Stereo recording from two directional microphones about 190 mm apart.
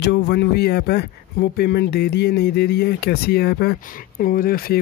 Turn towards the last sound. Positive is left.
turn(degrees=50)  # may be behind; listen again after turning